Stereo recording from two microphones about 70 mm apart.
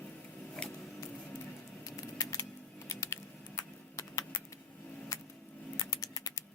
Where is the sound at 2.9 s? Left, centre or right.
Left.